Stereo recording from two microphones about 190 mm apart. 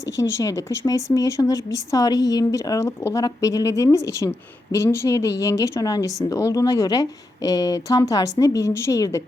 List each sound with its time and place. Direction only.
0.0 s speech: 15° left (ahead or behind)